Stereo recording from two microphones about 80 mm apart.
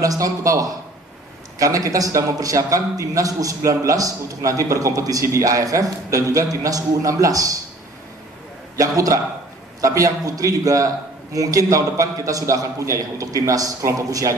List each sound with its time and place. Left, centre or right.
0.0 s a man's voice: right
8.7 s a man's voice: right